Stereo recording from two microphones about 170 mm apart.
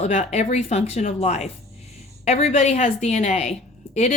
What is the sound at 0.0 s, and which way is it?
Speech, 40° left (ahead or behind).